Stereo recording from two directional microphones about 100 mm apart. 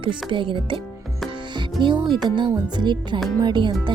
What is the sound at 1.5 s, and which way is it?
Music, 50° right (ahead or behind).